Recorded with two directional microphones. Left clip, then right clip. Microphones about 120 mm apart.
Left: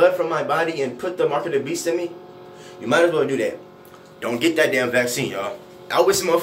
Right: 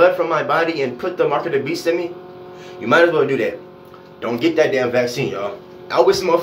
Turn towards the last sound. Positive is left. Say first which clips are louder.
# right 3 dB
turn(degrees=-15)  # may be behind; listen again after turning